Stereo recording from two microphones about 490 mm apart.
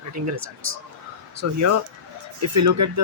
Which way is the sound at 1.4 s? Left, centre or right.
Right.